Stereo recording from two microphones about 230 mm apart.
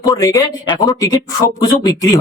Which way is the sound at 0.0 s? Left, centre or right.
Centre.